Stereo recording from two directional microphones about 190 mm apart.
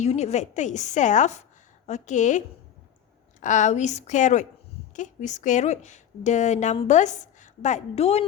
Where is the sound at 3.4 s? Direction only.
40° left (ahead or behind).